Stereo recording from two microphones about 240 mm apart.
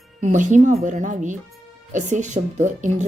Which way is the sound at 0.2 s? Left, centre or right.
Right.